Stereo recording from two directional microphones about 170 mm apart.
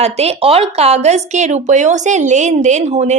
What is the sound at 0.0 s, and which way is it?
A woman's voice, 40° right (ahead or behind).